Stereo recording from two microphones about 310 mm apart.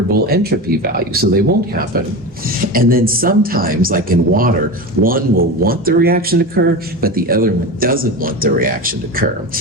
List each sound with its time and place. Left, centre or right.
0.1 s speech: right
2.7 s speech: right